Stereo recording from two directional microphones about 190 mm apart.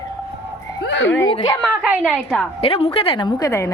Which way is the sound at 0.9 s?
75° left (ahead or behind).